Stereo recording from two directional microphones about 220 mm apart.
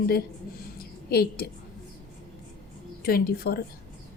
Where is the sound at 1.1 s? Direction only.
45° left (ahead or behind).